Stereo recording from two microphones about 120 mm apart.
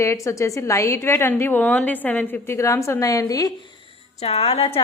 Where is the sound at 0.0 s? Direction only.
25° left (ahead or behind).